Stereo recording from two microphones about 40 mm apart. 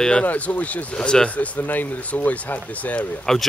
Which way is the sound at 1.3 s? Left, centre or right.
Left.